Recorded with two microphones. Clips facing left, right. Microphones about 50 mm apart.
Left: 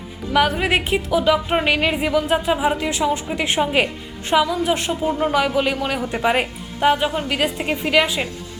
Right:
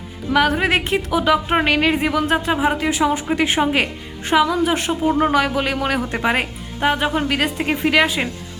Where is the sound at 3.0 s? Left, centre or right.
Right.